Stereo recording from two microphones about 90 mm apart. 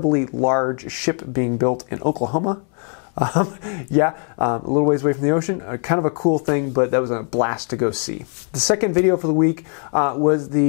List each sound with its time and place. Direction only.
0.0 s speech: 20° left (ahead or behind)